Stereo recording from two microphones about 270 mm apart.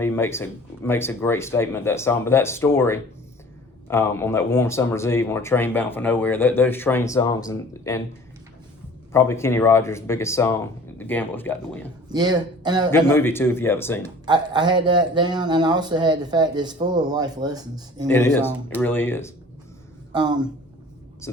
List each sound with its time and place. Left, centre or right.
0.0 s speech: centre
9.1 s speech: centre
12.0 s speech: centre
13.1 s speech: centre
14.3 s speech: centre
18.1 s speech: centre
20.1 s speech: centre